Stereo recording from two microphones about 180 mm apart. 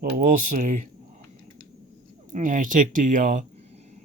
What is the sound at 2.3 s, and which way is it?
Speech, 45° right (ahead or behind).